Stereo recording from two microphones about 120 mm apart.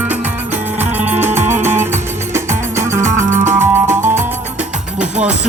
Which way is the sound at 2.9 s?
25° right (ahead or behind).